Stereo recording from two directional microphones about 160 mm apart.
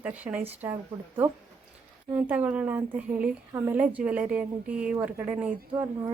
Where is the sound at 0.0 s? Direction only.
10° right (ahead or behind).